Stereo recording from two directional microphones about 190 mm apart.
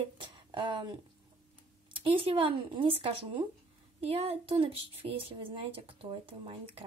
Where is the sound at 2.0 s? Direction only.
25° right (ahead or behind).